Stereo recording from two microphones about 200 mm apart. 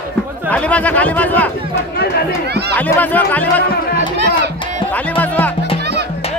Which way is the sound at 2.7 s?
10° left (ahead or behind).